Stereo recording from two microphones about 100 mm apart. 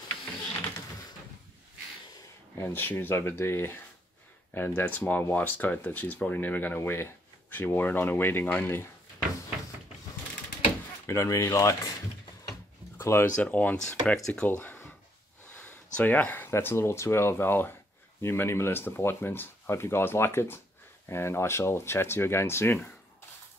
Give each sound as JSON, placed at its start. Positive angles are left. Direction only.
{"t": 2.5, "sound": "speech", "side_deg": 25}
{"t": 11.1, "sound": "speech", "side_deg": 30}
{"t": 12.9, "sound": "speech", "side_deg": 25}
{"t": 14.5, "sound": "a sound", "side_deg": 20}
{"t": 15.6, "sound": "speech", "side_deg": 15}